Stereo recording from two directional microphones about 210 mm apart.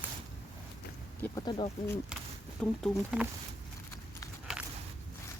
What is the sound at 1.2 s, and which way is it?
Speech, 20° left (ahead or behind).